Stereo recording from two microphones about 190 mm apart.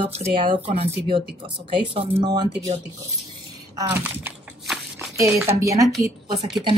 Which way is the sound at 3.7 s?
10° right (ahead or behind).